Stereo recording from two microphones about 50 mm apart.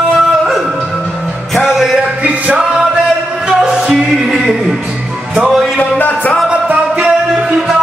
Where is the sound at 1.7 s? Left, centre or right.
Centre.